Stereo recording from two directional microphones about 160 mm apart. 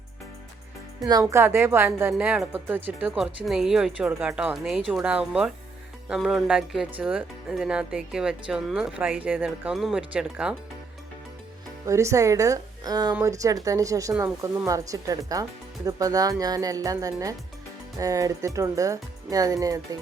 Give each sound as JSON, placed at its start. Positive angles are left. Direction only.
{"t": 1.0, "sound": "a woman's voice", "side_deg": -20}
{"t": 11.9, "sound": "speech", "side_deg": -20}